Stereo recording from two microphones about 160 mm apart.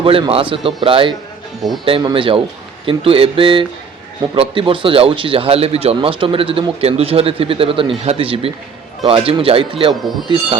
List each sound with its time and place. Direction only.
0.0 s a man's voice: 35° right (ahead or behind)